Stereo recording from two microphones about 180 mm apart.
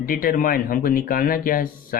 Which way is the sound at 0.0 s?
50° left (ahead or behind).